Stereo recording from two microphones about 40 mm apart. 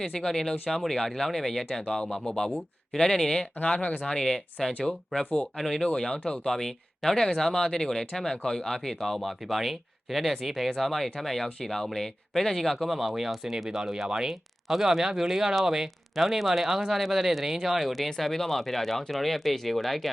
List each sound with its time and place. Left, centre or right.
0.0 s speech: centre
6.1 s speech: left; by 20.1 s centre